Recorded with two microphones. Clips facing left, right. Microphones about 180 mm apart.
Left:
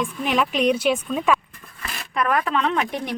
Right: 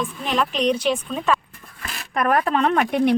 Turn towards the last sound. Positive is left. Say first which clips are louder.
# right 7 dB
turn(degrees=-60)  # may be behind; listen again after turning